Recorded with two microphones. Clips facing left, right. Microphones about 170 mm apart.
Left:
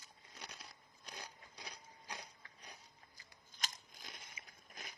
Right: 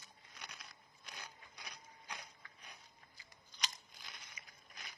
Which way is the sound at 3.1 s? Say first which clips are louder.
Even; 45° left (ahead or behind).